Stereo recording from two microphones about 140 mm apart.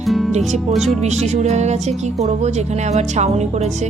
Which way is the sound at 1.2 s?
55° right (ahead or behind).